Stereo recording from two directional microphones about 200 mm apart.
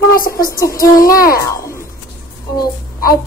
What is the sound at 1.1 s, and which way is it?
Speech, 15° left (ahead or behind).